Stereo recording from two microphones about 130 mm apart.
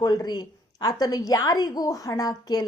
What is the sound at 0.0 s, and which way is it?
A woman's voice, 30° left (ahead or behind).